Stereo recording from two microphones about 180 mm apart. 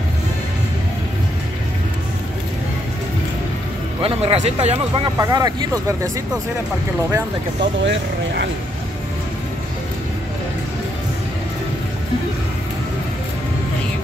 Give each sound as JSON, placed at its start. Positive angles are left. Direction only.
{"t": 4.0, "sound": "speech", "side_deg": -35}
{"t": 5.2, "sound": "speech", "side_deg": -20}
{"t": 7.8, "sound": "speech", "side_deg": -90}